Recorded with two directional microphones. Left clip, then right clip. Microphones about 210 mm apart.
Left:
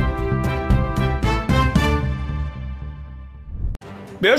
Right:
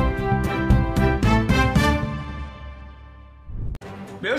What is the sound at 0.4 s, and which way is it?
Music, centre (ahead or behind).